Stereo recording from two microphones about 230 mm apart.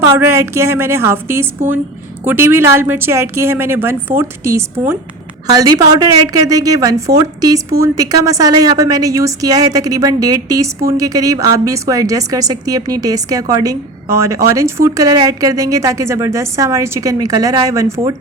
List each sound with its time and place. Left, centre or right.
0.0 s a woman's voice: centre